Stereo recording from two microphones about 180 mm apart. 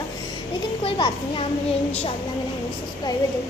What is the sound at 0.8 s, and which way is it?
Speech, 30° left (ahead or behind).